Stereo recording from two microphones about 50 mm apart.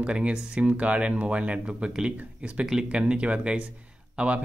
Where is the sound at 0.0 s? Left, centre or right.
Right.